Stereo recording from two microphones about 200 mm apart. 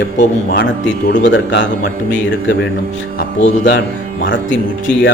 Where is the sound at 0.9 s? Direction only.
65° left (ahead or behind).